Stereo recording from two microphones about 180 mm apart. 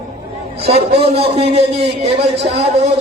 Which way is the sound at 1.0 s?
35° right (ahead or behind).